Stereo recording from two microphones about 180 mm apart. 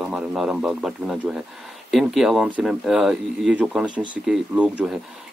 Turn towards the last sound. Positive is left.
turn(degrees=-5)  # may be behind; listen again after turning